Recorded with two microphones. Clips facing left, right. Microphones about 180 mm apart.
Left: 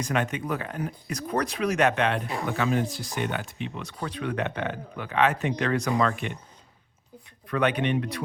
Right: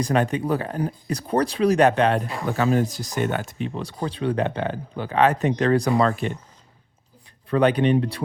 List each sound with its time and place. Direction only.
0.0 s speech: 35° right (ahead or behind)
7.5 s speech: 35° right (ahead or behind)